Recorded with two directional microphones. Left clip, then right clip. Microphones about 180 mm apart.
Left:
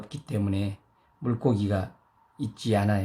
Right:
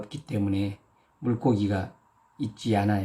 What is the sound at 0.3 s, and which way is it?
Speech, 35° left (ahead or behind).